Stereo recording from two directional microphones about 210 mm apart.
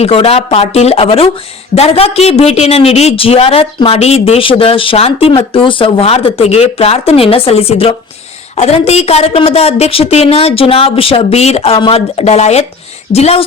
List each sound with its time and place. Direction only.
0.0 s speech: 30° left (ahead or behind)